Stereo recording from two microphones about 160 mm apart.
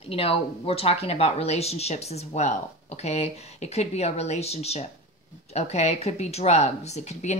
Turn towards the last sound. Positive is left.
turn(degrees=45)  # may be behind; listen again after turning